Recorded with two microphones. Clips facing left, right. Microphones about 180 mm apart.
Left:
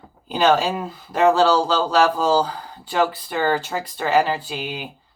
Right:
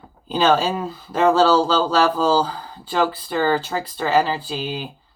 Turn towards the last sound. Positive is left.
turn(degrees=15)  # may be behind; listen again after turning